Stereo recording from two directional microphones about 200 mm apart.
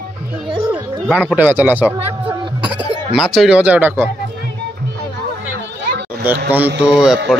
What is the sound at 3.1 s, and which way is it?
Speech, centre (ahead or behind).